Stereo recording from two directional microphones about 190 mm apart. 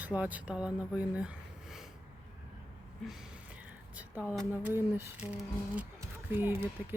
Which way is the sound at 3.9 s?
5° right (ahead or behind).